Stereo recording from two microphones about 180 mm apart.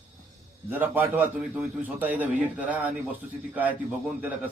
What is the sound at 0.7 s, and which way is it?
A man's voice, 10° right (ahead or behind).